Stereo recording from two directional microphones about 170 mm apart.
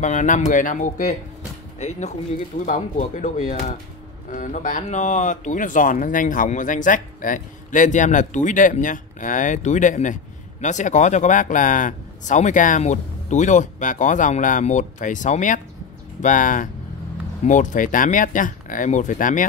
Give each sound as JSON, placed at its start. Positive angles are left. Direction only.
{"t": 0.0, "sound": "speech", "side_deg": 45}